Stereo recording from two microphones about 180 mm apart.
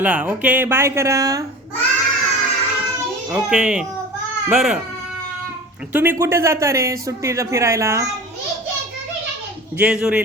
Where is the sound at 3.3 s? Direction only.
5° right (ahead or behind).